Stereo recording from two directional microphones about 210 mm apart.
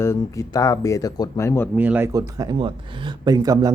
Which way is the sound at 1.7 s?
10° right (ahead or behind).